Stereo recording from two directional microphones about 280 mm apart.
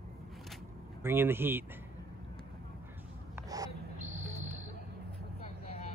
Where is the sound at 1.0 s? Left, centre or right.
Centre.